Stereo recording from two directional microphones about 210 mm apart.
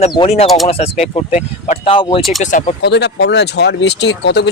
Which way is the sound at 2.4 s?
35° left (ahead or behind).